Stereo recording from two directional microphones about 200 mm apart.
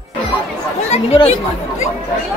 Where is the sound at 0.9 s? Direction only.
35° left (ahead or behind).